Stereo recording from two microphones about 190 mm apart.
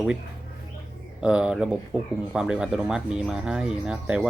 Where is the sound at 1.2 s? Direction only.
5° right (ahead or behind).